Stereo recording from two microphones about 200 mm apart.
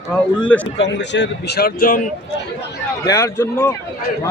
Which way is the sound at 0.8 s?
60° left (ahead or behind).